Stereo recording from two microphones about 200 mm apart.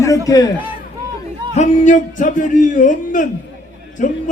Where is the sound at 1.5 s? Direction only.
35° left (ahead or behind).